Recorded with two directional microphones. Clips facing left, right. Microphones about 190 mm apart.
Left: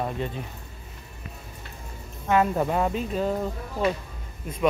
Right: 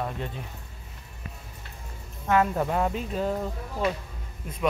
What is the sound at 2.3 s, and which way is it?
Speech, 10° left (ahead or behind).